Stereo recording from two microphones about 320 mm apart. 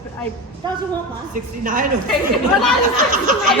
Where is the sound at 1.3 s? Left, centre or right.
Right.